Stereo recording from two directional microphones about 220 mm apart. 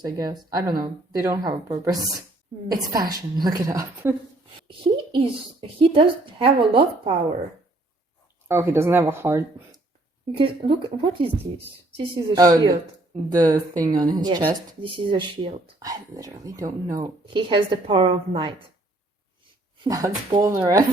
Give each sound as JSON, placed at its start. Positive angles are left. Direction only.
{"t": 0.0, "sound": "a woman's voice", "side_deg": -15}
{"t": 8.4, "sound": "a woman's voice", "side_deg": -10}
{"t": 10.3, "sound": "a woman's voice", "side_deg": -25}
{"t": 19.8, "sound": "a woman's voice", "side_deg": -20}